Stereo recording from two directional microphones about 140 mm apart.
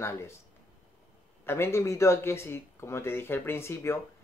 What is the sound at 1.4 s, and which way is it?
Speech, 15° left (ahead or behind).